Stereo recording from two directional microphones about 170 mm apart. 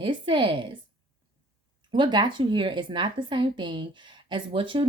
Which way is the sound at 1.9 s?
25° right (ahead or behind).